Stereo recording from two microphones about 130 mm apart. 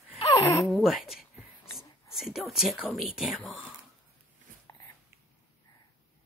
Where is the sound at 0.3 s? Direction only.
25° left (ahead or behind).